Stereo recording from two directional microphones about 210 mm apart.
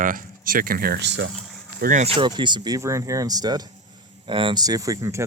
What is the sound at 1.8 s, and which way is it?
Speech, 35° right (ahead or behind).